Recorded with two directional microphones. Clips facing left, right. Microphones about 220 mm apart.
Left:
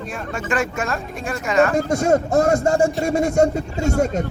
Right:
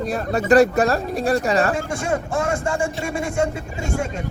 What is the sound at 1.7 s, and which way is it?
A man's voice, 40° left (ahead or behind).